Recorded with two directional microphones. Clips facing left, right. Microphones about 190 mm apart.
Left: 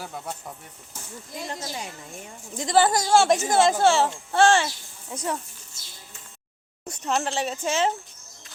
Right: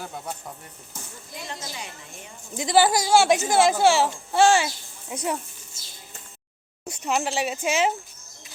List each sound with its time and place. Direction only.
0.0 s speech: centre (ahead or behind)
1.5 s a woman's voice: 45° left (ahead or behind)
2.6 s speech: 10° right (ahead or behind)
6.8 s speech: 10° right (ahead or behind)